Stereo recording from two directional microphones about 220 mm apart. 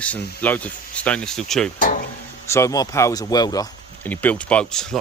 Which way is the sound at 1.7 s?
35° left (ahead or behind).